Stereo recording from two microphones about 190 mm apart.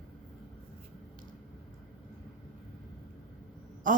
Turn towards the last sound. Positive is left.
turn(degrees=-45)  # may be behind; listen again after turning